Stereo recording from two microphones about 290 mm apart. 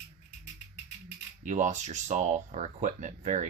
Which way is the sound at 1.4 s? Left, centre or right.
Right.